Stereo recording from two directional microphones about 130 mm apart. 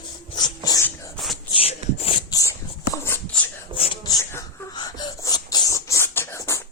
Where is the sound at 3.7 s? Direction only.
40° right (ahead or behind).